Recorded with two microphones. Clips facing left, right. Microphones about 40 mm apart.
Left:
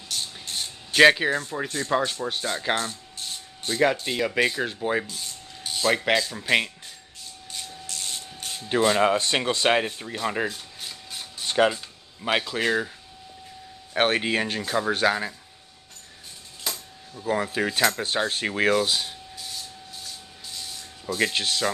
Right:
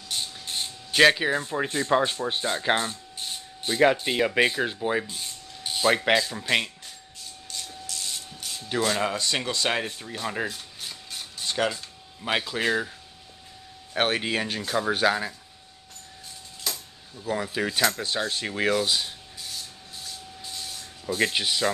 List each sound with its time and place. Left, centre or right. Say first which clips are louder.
0.1 s vehicle: even; centre
0.9 s speech: left 2 dB; centre
1.3 s speech: right 1 dB; centre
5.0 s speech: even; centre
7.8 s printer: left 1 dB; left
8.5 s speech: left 5 dB; left; by 11.4 s centre
11.4 s speech: left 5 dB; centre
13.9 s speech: left 3 dB; centre
16.6 s a sound: left 1 dB; centre
17.3 s speech: left 3 dB; centre
21.2 s speech: even; centre